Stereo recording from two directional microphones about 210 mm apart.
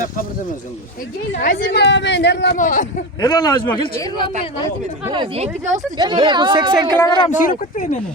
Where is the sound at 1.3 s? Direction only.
45° left (ahead or behind).